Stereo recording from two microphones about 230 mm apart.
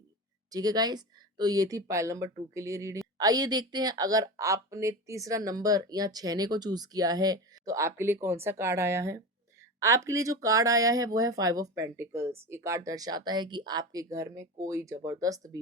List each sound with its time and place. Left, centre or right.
0.5 s speech: centre